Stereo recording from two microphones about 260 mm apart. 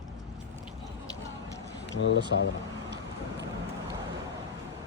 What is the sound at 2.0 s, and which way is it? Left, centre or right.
Speech, left.